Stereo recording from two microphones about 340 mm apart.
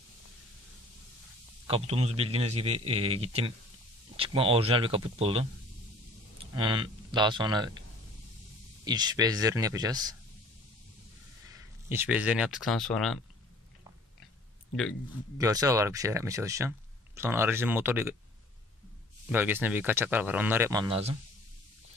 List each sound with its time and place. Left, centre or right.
1.7 s speech: centre
6.5 s speech: centre
8.8 s speech: centre
11.5 s speech: centre
15.3 s speech: centre
19.3 s speech: centre